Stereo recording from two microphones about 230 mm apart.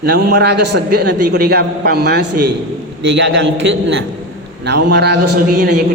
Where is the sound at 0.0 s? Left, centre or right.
Right.